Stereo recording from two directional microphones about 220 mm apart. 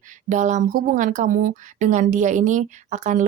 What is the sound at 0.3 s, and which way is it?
A woman's voice, 35° right (ahead or behind).